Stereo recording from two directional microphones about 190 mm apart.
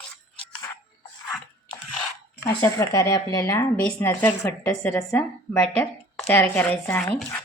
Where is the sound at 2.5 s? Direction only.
15° left (ahead or behind).